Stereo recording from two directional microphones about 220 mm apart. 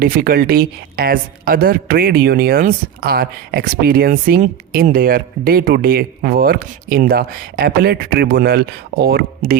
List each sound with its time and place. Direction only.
0.0 s speech: 40° right (ahead or behind)